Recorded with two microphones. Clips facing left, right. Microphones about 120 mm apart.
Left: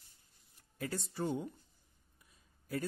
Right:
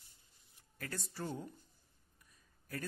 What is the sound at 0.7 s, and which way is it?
Speech, 25° left (ahead or behind).